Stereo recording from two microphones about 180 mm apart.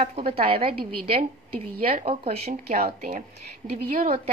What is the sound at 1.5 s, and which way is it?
Speech, 50° right (ahead or behind).